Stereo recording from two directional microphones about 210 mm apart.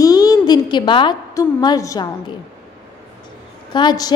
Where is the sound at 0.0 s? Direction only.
15° left (ahead or behind).